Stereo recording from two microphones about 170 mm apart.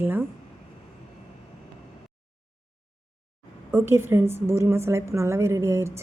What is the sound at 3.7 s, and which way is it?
A woman's voice, 15° right (ahead or behind).